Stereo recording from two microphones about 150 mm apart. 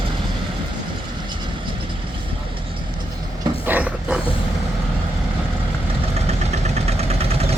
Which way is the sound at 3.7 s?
10° right (ahead or behind).